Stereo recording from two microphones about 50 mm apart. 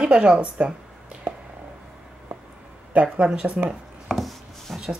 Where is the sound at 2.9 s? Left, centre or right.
Right.